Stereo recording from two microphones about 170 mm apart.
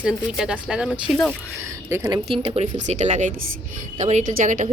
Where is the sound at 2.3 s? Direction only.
35° right (ahead or behind).